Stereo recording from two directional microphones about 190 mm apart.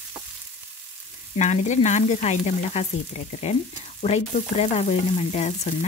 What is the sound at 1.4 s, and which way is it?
Frying, 40° left (ahead or behind).